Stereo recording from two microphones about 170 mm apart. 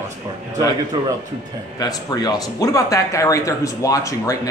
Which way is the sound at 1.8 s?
20° left (ahead or behind).